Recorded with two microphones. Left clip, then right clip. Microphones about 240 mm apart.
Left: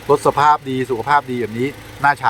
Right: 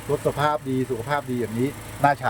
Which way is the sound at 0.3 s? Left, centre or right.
Centre.